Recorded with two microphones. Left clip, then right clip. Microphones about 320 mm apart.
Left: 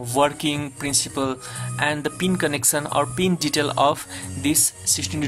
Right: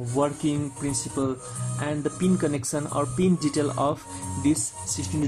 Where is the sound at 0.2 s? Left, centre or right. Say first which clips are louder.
Left 5 dB; left.